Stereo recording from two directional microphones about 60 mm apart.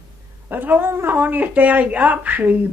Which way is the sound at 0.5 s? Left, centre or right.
Right.